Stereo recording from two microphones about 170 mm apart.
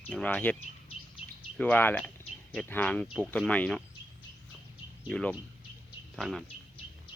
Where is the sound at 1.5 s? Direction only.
10° left (ahead or behind).